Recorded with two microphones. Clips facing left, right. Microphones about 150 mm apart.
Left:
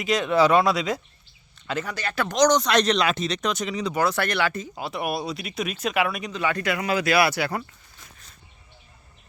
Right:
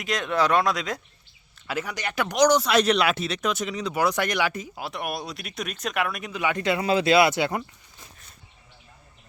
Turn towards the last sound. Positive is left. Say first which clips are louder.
# right 2 dB
turn(degrees=-20)  # may be behind; listen again after turning